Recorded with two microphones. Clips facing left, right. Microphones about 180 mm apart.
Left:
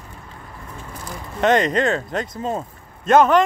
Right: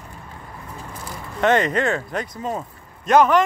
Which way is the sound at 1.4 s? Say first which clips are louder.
Left 1 dB; 20° left (ahead or behind).